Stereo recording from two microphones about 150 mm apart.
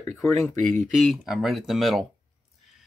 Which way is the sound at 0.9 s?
Centre (ahead or behind).